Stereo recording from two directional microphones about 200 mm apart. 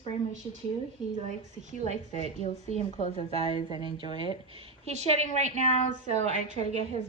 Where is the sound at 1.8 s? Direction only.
35° right (ahead or behind).